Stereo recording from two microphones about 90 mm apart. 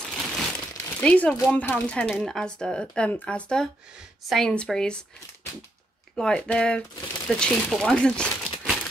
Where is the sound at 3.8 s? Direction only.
10° right (ahead or behind).